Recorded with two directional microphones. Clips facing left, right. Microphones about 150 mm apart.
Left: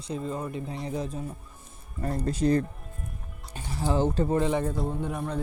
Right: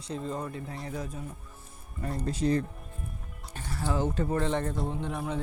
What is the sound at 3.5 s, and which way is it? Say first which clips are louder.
Speech: left 3 dB; 15° left (ahead or behind).